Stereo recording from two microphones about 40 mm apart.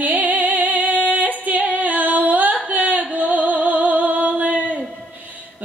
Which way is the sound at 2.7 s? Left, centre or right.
Right.